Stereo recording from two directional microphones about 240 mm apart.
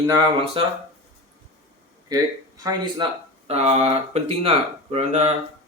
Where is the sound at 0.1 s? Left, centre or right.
Right.